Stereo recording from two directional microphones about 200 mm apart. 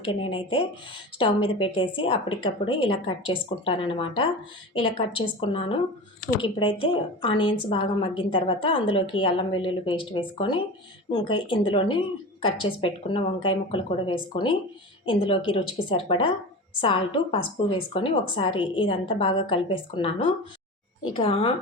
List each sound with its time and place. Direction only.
0.0 s a woman's voice: 25° left (ahead or behind)